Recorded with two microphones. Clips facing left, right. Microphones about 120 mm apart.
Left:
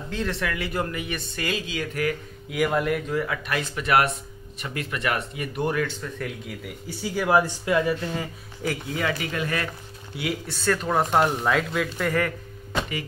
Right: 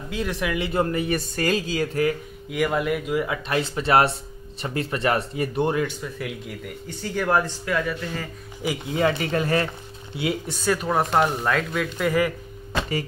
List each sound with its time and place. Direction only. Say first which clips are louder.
0.1 s speech: right 2 dB; 10° right (ahead or behind)
0.9 s speech: right 7 dB; 40° right (ahead or behind)
2.5 s a man's voice: even; centre (ahead or behind)
3.1 s speech: right 2 dB; 15° right (ahead or behind)
3.4 s speech: right 3 dB; 30° right (ahead or behind)
6.1 s speech: right 1 dB; centre (ahead or behind)
7.6 s speech: left 3 dB; 20° left (ahead or behind)
8.9 s speech: right 9 dB; 35° right (ahead or behind)
10.6 s a man's voice: even; 10° right (ahead or behind)